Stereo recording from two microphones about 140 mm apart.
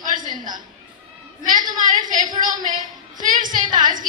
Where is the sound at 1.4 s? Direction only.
70° right (ahead or behind).